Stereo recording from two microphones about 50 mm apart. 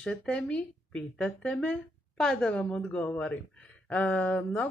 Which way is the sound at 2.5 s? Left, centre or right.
Left.